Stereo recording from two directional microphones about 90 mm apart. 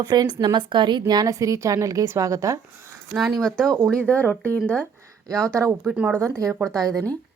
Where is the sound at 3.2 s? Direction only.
Centre (ahead or behind).